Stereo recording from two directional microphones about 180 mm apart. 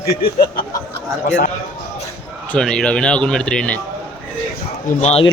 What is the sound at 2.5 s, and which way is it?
A man's voice, 5° left (ahead or behind).